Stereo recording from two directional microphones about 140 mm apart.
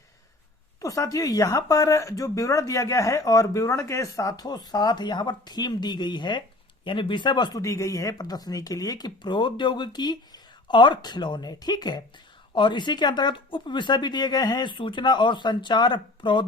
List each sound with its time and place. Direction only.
0.8 s speech: 25° left (ahead or behind)